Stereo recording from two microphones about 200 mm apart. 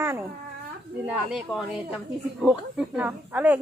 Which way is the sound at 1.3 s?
Centre (ahead or behind).